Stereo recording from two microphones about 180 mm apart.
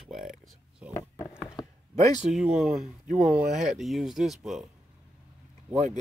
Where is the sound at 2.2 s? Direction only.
5° right (ahead or behind).